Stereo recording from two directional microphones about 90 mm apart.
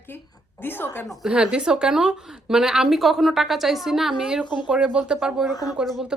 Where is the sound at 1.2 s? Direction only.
10° right (ahead or behind).